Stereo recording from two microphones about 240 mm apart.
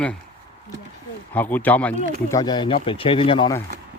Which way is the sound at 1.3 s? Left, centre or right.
Centre.